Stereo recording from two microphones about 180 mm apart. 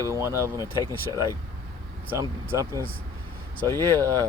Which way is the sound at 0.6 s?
20° left (ahead or behind).